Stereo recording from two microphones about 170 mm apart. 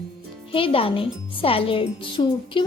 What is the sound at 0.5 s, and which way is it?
Speech, 30° left (ahead or behind).